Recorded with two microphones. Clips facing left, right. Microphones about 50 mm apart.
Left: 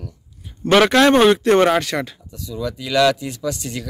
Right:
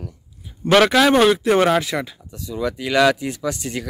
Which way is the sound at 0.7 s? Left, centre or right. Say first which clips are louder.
Left 1 dB; centre.